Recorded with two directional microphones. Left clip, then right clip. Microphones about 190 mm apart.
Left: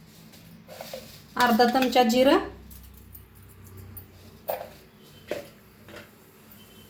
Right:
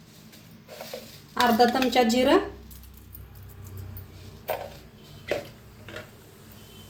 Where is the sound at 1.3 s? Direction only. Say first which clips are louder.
Even; 40° left (ahead or behind).